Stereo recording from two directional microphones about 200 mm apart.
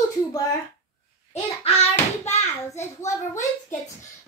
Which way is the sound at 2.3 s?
35° left (ahead or behind).